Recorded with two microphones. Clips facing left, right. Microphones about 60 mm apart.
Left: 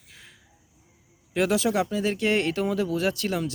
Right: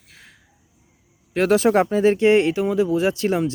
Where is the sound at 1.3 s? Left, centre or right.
Right.